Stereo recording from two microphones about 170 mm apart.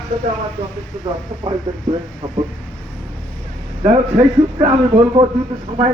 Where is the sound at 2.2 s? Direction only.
35° right (ahead or behind).